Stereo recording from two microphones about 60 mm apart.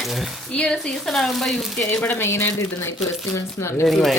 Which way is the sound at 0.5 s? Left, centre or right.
Centre.